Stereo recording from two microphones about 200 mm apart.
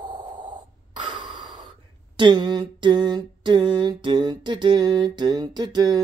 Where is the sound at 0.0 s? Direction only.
20° right (ahead or behind).